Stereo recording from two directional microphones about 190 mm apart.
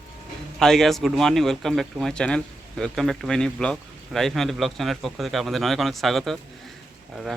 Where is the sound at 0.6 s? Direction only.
Centre (ahead or behind).